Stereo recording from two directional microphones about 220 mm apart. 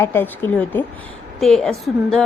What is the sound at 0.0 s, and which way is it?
Speech, 10° left (ahead or behind).